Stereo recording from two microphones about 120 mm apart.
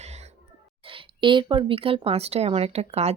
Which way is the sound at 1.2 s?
45° right (ahead or behind).